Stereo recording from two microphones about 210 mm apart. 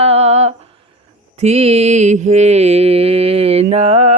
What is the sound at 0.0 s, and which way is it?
Humming, 30° right (ahead or behind).